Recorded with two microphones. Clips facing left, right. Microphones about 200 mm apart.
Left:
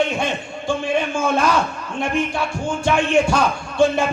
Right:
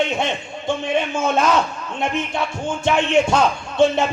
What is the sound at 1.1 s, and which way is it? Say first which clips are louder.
Speech: right 2 dB; 20° right (ahead or behind).